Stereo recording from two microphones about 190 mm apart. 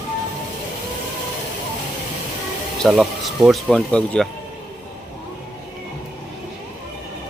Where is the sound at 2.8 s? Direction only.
Centre (ahead or behind).